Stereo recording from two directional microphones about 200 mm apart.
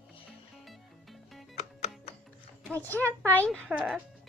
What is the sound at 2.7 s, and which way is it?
Speech, 10° left (ahead or behind).